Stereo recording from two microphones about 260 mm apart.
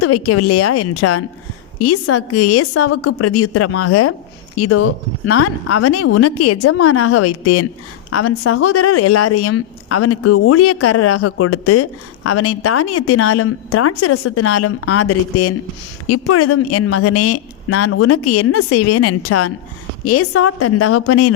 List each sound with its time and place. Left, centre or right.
0.0 s a woman's voice: left